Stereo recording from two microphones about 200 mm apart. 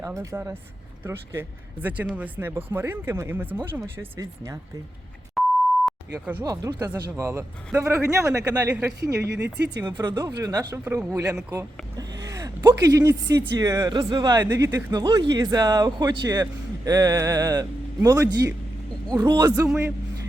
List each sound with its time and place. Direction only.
0.0 s a man's voice: 15° right (ahead or behind)
5.4 s beep: centre (ahead or behind)
6.4 s a man's voice: 15° right (ahead or behind)
9.2 s speech: 55° right (ahead or behind)
9.7 s a man's voice: 20° right (ahead or behind)